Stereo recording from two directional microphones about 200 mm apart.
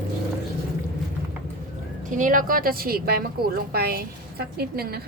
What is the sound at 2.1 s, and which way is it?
A woman's voice, 40° right (ahead or behind).